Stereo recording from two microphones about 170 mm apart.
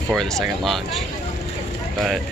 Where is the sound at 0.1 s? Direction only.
Centre (ahead or behind).